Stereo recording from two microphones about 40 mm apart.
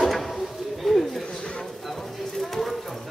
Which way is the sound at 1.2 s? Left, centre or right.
Centre.